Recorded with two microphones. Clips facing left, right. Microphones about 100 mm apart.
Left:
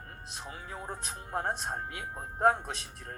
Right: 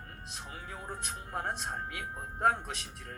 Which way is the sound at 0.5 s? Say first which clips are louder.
Left 1 dB; 30° left (ahead or behind).